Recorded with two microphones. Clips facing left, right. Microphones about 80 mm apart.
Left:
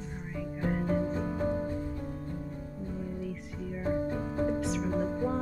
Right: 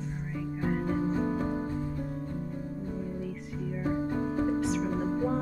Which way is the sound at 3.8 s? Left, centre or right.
Centre.